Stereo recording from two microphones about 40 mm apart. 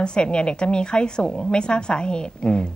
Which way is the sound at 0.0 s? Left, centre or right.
Left.